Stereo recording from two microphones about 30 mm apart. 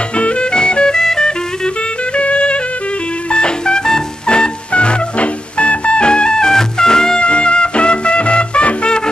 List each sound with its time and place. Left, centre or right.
0.1 s music: left
0.5 s music: left
1.0 s music: centre
2.1 s music: left
7.2 s music: left